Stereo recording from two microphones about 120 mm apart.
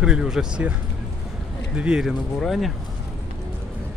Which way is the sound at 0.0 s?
5° right (ahead or behind).